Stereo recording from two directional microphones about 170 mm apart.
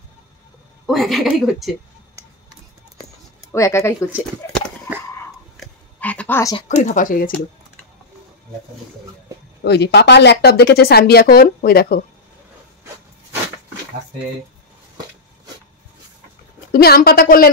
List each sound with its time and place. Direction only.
0.8 s a woman's voice: centre (ahead or behind)
3.5 s speech: 15° left (ahead or behind)
5.6 s a sound: 10° left (ahead or behind)
6.7 s a woman's voice: 50° left (ahead or behind)
9.6 s speech: 85° left; by 12.0 s 65° left (ahead or behind)
16.7 s a woman's voice: 65° left (ahead or behind)